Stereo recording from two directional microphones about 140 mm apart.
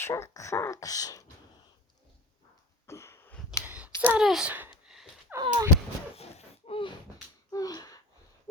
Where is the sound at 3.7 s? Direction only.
10° right (ahead or behind).